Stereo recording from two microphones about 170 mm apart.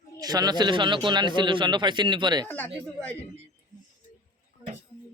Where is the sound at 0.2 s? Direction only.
20° right (ahead or behind).